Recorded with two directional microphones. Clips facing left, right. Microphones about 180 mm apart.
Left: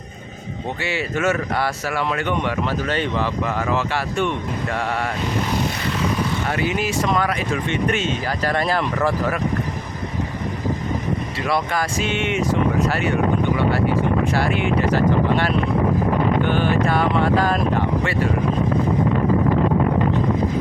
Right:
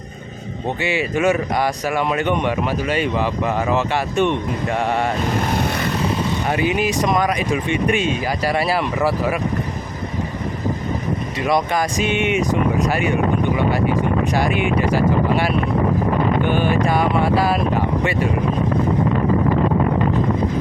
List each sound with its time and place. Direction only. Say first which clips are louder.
0.8 s a man's voice: right 4 dB; 15° right (ahead or behind)
6.5 s a man's voice: right 3 dB; 15° right (ahead or behind)
11.4 s a man's voice: right 4 dB; 15° right (ahead or behind)
13.6 s a sound: right 1 dB; 15° right (ahead or behind)
14.3 s a man's voice: right 1 dB; 15° right (ahead or behind)